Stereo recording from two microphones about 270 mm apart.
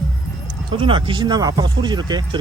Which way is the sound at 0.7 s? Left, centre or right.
Centre.